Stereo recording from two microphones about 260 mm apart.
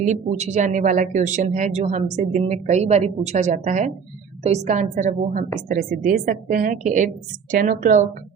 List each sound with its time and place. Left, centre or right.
0.0 s a woman's voice: right